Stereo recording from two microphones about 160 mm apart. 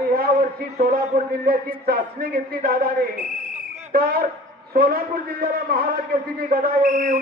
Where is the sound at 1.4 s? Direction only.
70° right (ahead or behind).